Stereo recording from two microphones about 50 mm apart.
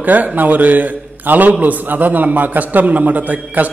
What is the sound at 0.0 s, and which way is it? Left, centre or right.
A man's voice, right.